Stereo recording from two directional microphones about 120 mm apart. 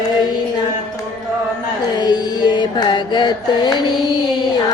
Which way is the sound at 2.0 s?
35° left (ahead or behind).